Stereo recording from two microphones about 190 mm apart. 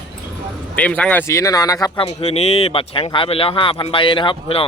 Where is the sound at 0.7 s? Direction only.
5° left (ahead or behind).